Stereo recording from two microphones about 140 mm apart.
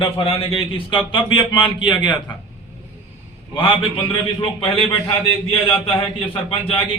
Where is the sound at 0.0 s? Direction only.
35° left (ahead or behind).